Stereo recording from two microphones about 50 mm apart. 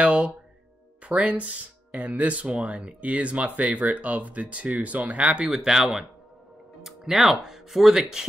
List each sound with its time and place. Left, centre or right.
0.0 s music: right
1.0 s speech: right